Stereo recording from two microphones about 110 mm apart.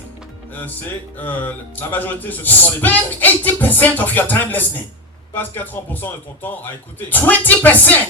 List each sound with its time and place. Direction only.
1.1 s speech: 15° left (ahead or behind)